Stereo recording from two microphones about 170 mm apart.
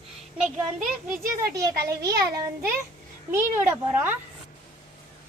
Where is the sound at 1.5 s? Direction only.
20° right (ahead or behind).